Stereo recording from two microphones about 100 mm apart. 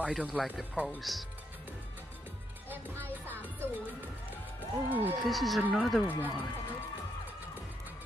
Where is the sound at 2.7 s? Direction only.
20° right (ahead or behind).